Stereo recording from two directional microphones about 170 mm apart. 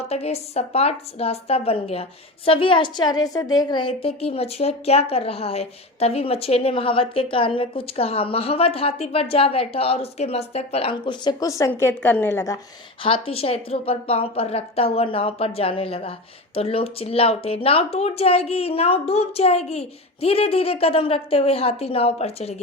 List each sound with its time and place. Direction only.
0.1 s a woman's voice: 40° left (ahead or behind); by 12.5 s 15° left (ahead or behind)
13.0 s a woman's voice: 30° left (ahead or behind)